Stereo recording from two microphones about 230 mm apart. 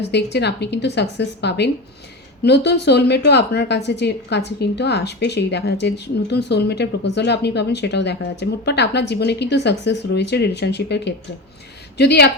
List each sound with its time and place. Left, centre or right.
0.0 s a woman's voice: left